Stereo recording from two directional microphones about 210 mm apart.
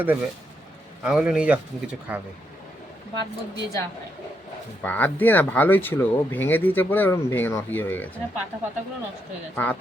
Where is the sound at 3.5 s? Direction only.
15° left (ahead or behind).